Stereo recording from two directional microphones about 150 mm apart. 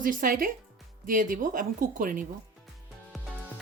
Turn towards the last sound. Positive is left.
turn(degrees=0)  # may be behind; listen again after turning